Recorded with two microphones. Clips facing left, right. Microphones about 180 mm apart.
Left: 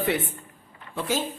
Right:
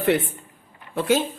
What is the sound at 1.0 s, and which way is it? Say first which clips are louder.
Speech: right 7 dB; 70° right (ahead or behind).